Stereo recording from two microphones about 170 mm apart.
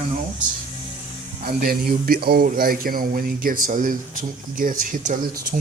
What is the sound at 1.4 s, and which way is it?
A man's voice, 60° right (ahead or behind).